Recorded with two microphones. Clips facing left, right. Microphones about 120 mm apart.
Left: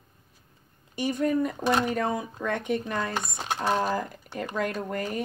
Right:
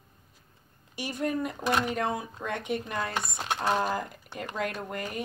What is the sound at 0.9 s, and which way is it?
Speech, 50° left (ahead or behind).